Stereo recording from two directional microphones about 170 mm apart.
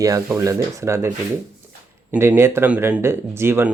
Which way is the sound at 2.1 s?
15° right (ahead or behind).